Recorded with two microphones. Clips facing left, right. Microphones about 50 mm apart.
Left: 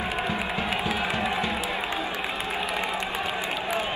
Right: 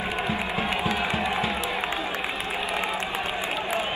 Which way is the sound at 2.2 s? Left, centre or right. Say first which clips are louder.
Even; centre.